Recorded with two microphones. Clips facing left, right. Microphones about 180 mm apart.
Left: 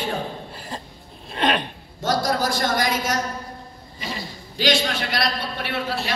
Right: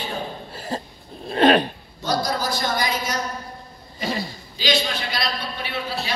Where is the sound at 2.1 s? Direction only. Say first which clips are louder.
Left 1 dB; 90° left.